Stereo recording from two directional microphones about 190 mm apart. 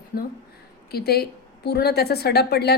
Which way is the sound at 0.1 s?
50° left (ahead or behind).